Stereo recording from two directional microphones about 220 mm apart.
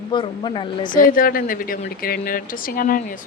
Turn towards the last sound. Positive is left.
turn(degrees=40)  # may be behind; listen again after turning